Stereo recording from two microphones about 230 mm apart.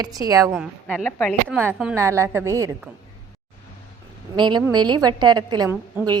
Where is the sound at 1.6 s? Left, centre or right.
Centre.